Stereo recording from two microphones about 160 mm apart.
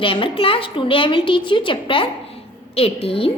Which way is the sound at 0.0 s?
35° left (ahead or behind).